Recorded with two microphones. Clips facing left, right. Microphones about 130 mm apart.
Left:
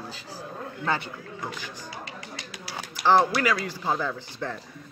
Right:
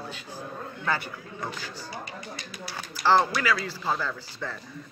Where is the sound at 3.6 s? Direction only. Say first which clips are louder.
Left 2 dB; 20° left (ahead or behind).